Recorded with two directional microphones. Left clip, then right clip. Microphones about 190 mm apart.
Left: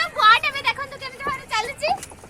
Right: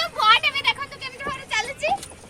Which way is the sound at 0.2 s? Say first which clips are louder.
Left 2 dB; 50° left (ahead or behind).